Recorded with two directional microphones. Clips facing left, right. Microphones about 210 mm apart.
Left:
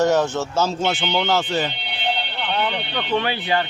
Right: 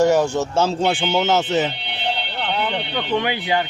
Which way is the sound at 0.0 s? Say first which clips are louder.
Right 2 dB; 10° right (ahead or behind).